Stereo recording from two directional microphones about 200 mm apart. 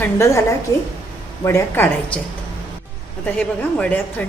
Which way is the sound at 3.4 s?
10° left (ahead or behind).